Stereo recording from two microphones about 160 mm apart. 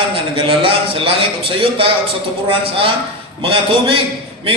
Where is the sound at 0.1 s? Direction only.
35° right (ahead or behind).